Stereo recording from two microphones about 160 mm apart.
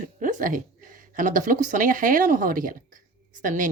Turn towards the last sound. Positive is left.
turn(degrees=-55)  # may be behind; listen again after turning